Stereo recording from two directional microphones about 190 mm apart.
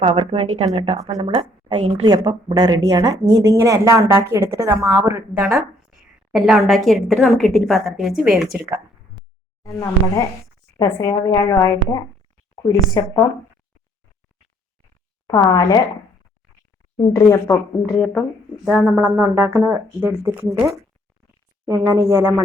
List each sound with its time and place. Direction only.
0.0 s a woman's voice: 30° right (ahead or behind)
5.5 s a woman's voice: 5° right (ahead or behind)
9.2 s a sound: centre (ahead or behind)
10.8 s speech: 20° left (ahead or behind)
15.3 s speech: 20° left (ahead or behind)
17.2 s speech: 15° left (ahead or behind)
17.9 s a woman's voice: centre (ahead or behind); by 22.4 s 15° right (ahead or behind)